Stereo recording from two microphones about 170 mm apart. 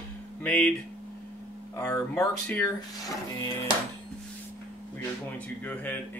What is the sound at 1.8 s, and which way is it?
Speech, 5° left (ahead or behind).